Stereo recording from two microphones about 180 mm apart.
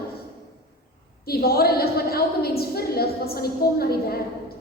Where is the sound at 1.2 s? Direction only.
60° left (ahead or behind).